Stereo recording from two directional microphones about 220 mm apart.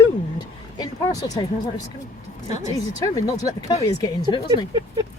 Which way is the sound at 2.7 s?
15° left (ahead or behind).